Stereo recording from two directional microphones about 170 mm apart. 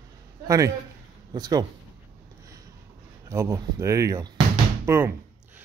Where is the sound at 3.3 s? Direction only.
15° right (ahead or behind).